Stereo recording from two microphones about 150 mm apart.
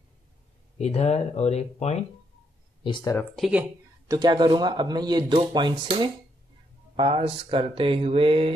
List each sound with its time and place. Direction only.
0.7 s speech: 45° left (ahead or behind)
2.8 s speech: 30° left (ahead or behind)
3.3 s speech: 5° right (ahead or behind)
4.1 s speech: 30° right (ahead or behind)
5.5 s mantra: 30° right (ahead or behind)